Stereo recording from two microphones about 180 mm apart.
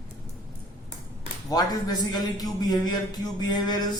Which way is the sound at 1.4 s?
20° left (ahead or behind).